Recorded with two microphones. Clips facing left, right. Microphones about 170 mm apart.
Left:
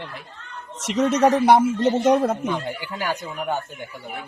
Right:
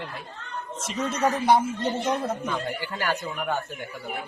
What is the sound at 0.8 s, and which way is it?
Speech, 75° left (ahead or behind).